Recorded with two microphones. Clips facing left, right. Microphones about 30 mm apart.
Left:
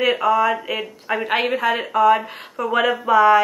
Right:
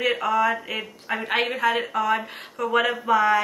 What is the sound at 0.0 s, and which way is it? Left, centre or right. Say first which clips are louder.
Speech: left 4 dB; centre.